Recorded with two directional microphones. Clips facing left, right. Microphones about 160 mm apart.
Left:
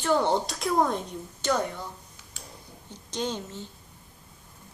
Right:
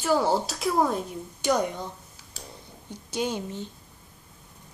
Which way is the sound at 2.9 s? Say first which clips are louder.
Right 2 dB; 10° right (ahead or behind).